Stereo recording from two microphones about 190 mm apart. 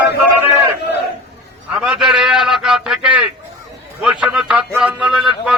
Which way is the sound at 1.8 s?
5° right (ahead or behind).